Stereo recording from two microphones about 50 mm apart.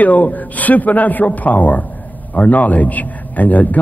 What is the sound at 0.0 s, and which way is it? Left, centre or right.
Speech, left.